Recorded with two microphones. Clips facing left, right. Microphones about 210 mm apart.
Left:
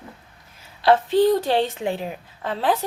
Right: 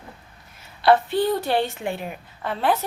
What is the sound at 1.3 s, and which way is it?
Speech, 30° left (ahead or behind).